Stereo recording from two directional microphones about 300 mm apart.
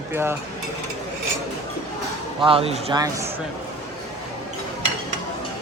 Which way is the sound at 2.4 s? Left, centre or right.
Centre.